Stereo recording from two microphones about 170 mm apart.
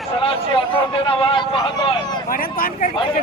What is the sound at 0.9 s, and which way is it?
Speech, 30° left (ahead or behind).